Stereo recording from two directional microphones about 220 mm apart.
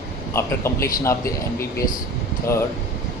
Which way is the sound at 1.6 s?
40° left (ahead or behind).